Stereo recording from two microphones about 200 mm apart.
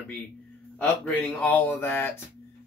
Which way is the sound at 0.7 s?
10° left (ahead or behind).